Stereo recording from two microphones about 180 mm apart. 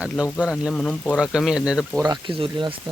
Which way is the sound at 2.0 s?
25° right (ahead or behind).